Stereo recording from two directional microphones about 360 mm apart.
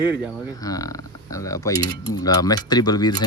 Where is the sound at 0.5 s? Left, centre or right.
Centre.